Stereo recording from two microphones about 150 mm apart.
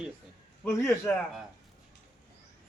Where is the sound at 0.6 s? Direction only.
20° left (ahead or behind).